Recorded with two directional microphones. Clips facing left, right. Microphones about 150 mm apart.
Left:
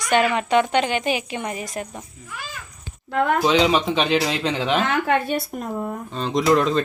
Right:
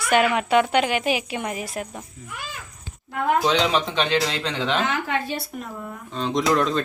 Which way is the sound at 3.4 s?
5° left (ahead or behind).